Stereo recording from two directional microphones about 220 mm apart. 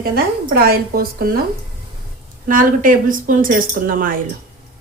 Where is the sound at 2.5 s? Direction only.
40° right (ahead or behind).